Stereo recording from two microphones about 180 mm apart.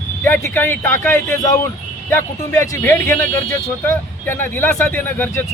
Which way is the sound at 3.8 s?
10° left (ahead or behind).